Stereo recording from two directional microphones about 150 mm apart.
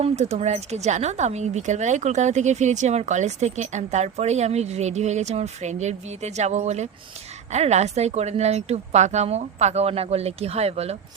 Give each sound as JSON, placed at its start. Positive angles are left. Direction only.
{"t": 0.0, "sound": "speech", "side_deg": -45}